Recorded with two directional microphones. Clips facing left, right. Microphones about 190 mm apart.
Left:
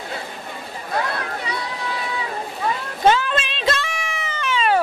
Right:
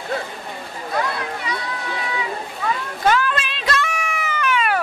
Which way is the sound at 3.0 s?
25° left (ahead or behind).